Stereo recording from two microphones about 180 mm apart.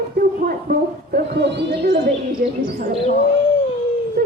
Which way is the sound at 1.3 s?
70° right (ahead or behind).